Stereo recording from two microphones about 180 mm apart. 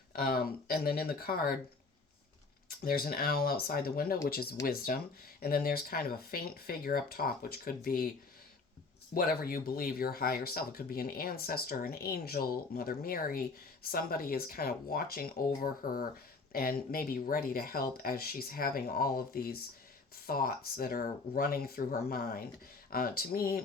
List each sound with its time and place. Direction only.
0.2 s speech: 55° left (ahead or behind)
2.8 s speech: 55° left (ahead or behind)
9.1 s speech: 55° left (ahead or behind)